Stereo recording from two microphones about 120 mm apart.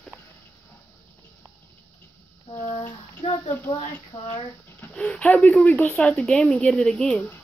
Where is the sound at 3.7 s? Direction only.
55° left (ahead or behind).